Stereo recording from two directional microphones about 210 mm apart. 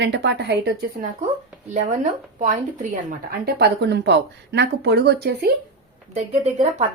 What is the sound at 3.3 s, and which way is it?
Speech, 50° right (ahead or behind).